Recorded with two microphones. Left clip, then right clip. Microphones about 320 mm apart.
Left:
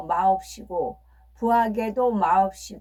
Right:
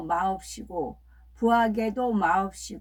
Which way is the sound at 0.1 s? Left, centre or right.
Centre.